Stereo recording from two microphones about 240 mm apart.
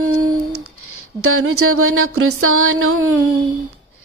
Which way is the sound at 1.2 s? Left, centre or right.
Right.